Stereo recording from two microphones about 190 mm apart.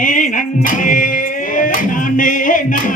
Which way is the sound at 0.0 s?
45° left (ahead or behind).